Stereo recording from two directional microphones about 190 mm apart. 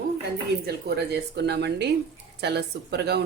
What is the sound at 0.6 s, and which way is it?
Speech, 60° right (ahead or behind).